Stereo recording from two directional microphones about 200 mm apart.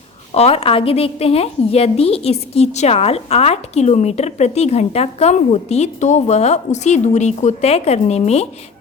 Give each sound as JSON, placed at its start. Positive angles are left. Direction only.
{"t": 0.3, "sound": "a woman's voice", "side_deg": 30}